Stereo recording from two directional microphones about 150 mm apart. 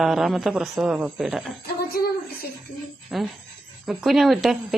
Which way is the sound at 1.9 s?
90° left.